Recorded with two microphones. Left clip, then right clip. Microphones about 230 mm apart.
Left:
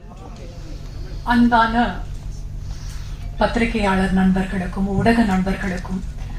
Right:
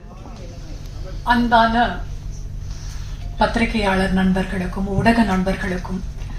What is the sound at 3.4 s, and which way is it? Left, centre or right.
Speech, right.